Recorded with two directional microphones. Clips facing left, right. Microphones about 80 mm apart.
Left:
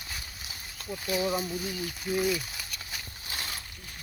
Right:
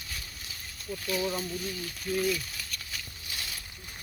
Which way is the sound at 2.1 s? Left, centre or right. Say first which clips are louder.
Left 1 dB; centre.